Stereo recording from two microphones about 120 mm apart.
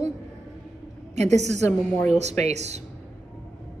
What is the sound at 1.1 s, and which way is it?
A woman's voice, 70° right (ahead or behind).